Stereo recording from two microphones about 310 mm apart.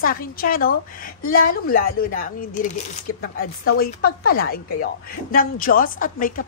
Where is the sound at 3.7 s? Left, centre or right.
Left.